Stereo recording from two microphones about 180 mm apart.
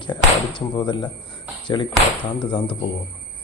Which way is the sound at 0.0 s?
25° left (ahead or behind).